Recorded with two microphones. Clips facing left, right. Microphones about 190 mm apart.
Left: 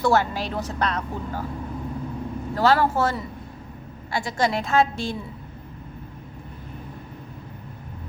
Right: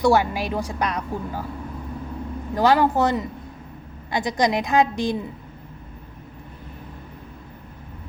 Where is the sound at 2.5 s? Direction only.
15° right (ahead or behind).